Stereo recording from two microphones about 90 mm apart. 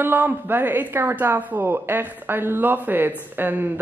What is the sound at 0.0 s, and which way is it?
A woman's voice, 25° right (ahead or behind).